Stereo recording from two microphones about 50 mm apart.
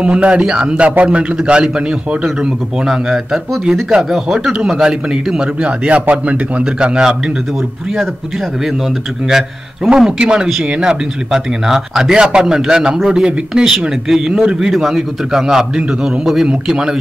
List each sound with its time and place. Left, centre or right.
0.0 s a man's voice: right
4.1 s speech: centre
5.6 s a man's voice: right
6.6 s speech: centre
9.9 s speech: centre